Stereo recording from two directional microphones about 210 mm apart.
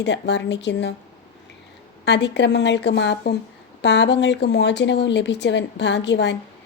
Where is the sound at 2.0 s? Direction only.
55° left (ahead or behind).